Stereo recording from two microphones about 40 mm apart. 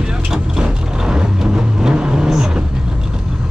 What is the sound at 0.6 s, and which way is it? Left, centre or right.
Vehicle, right.